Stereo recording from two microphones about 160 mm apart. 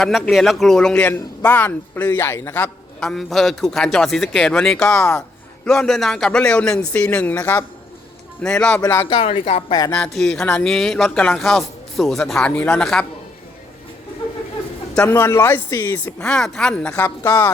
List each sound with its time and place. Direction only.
0.0 s a man's voice: centre (ahead or behind)
3.0 s a man's voice: centre (ahead or behind)
4.9 s a man's voice: 15° left (ahead or behind)
5.6 s a man's voice: 5° left (ahead or behind)
9.0 s speech: 30° left (ahead or behind)
9.7 s speech: 25° left (ahead or behind)
10.0 s a man's voice: 5° left (ahead or behind)
15.0 s a man's voice: 15° left (ahead or behind)